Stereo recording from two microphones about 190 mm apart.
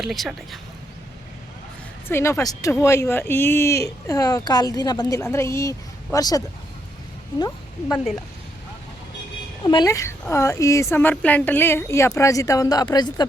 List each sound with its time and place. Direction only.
0.0 s speech: centre (ahead or behind)
2.0 s speech: 15° left (ahead or behind)
7.9 s speech: centre (ahead or behind)
9.6 s speech: 20° left (ahead or behind)